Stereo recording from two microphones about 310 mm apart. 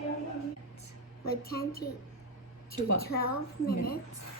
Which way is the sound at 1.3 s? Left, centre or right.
Left.